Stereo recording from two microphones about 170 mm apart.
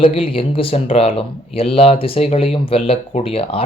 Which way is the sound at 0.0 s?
35° left (ahead or behind).